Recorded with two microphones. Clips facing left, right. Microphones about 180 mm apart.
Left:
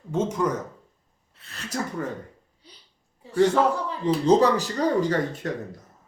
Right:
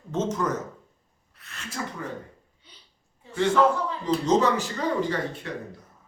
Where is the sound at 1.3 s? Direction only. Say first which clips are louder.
Left 6 dB; 30° left (ahead or behind).